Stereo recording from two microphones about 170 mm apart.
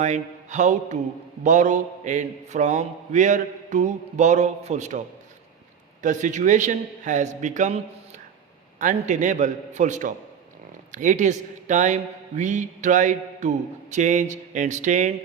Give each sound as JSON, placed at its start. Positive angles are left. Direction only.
{"t": 0.0, "sound": "mantra", "side_deg": -45}
{"t": 8.8, "sound": "mantra", "side_deg": -50}